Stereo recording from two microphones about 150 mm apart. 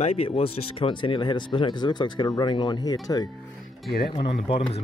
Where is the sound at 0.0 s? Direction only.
40° left (ahead or behind).